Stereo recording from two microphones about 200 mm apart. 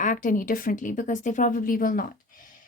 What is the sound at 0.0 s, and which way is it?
A woman's voice, 40° left (ahead or behind).